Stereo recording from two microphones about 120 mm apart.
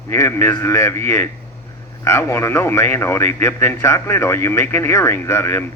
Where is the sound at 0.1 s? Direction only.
20° left (ahead or behind).